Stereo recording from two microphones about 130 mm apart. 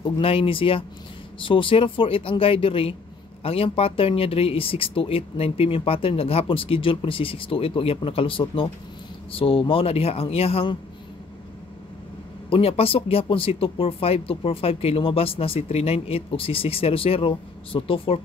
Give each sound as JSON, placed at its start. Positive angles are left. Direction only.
{"t": 0.0, "sound": "speech", "side_deg": 45}
{"t": 12.4, "sound": "speech", "side_deg": 45}